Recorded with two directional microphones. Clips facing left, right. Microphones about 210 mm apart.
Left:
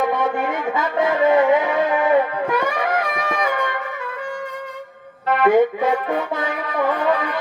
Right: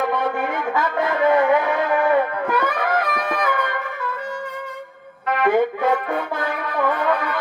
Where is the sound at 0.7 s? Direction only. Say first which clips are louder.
Left 3 dB; 25° left (ahead or behind).